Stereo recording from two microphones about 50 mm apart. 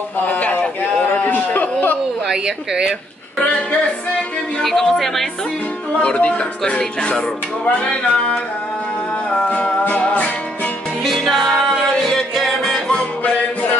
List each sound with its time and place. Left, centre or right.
0.3 s a sound: left
2.2 s speech: centre
4.6 s yodeling: centre
5.9 s speech: left
6.8 s music: centre
11.2 s music: centre